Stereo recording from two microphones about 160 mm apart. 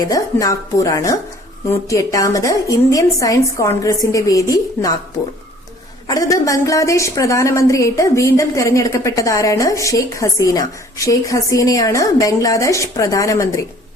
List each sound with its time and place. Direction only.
0.0 s a woman's voice: 20° left (ahead or behind)
6.1 s a woman's voice: 20° left (ahead or behind)